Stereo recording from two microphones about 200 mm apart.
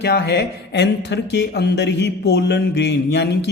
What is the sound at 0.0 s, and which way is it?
Speech, 55° left (ahead or behind).